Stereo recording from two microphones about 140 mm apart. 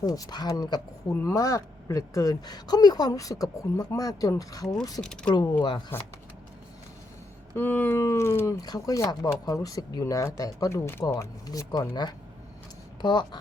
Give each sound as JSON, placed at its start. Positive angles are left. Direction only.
{"t": 0.0, "sound": "speech", "side_deg": 25}
{"t": 4.9, "sound": "speech", "side_deg": 5}
{"t": 5.9, "sound": "speech", "side_deg": 15}
{"t": 7.5, "sound": "speech", "side_deg": 15}